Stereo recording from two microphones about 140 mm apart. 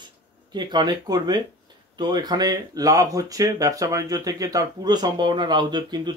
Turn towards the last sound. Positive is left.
turn(degrees=-30)  # may be behind; listen again after turning